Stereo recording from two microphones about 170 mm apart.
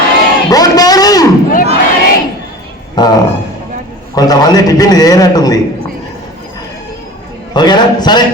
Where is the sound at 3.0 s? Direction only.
25° left (ahead or behind).